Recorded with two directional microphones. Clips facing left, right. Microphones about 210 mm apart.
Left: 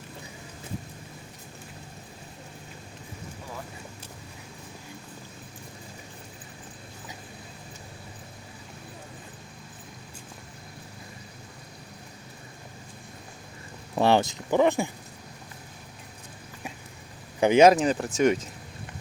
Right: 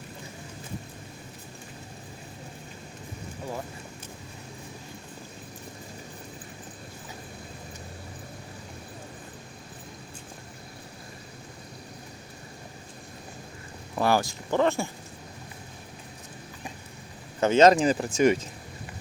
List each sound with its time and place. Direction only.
13.9 s speech: 25° left (ahead or behind)
17.4 s speech: 10° left (ahead or behind)